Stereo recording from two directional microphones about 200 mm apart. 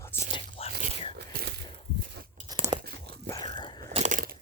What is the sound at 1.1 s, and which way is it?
Whispering, 55° right (ahead or behind).